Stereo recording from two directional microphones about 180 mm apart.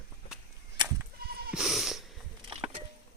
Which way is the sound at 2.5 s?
30° right (ahead or behind).